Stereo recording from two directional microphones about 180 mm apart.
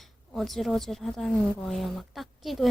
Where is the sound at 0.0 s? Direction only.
Centre (ahead or behind).